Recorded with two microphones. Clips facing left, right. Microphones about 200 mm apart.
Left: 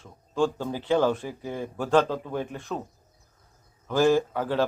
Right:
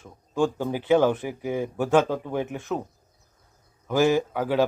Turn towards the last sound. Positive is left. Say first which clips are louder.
# right 1 dB
turn(degrees=-10)  # may be behind; listen again after turning